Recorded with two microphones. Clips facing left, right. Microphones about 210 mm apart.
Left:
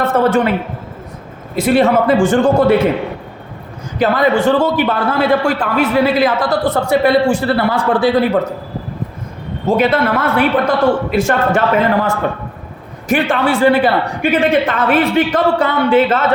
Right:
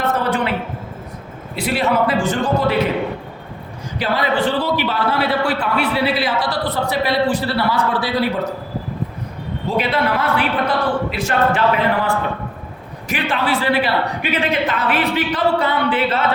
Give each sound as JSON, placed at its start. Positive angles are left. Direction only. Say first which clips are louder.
{"t": 1.5, "sound": "a man's voice", "louder": "left 7 dB", "side_deg": 45}
{"t": 3.9, "sound": "a man's voice", "louder": "left 6 dB", "side_deg": 50}
{"t": 9.6, "sound": "a man's voice", "louder": "left 6 dB", "side_deg": 45}